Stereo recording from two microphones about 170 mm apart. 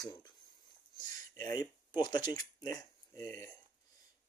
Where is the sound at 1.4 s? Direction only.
25° left (ahead or behind).